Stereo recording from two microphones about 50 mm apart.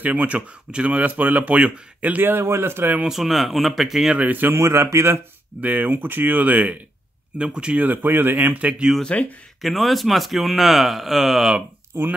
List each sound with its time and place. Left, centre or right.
0.0 s speech: right
2.2 s speech: right
3.1 s a man's voice: centre
4.3 s speech: right
4.6 s a man's voice: right
5.6 s speech: right
7.8 s speech: right
8.5 s speech: right
9.0 s speech: left
9.6 s a man's voice: centre